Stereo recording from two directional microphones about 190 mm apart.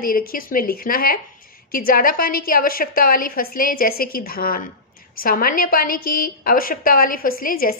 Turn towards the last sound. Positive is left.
turn(degrees=50)  # may be behind; listen again after turning